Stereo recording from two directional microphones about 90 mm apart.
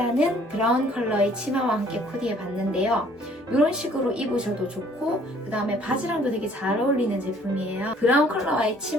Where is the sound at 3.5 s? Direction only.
10° right (ahead or behind).